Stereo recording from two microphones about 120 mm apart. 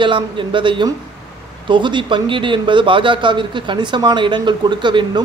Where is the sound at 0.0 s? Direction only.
45° right (ahead or behind).